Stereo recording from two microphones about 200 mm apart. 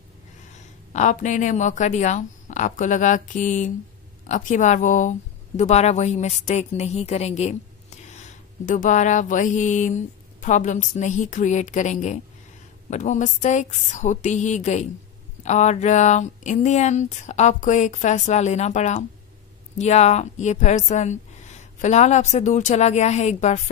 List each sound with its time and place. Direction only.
0.9 s a woman's voice: 40° left (ahead or behind)